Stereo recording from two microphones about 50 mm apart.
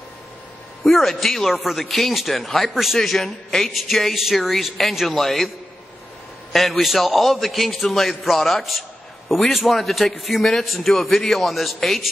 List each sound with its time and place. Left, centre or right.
0.8 s a man's voice: centre
6.5 s a man's voice: centre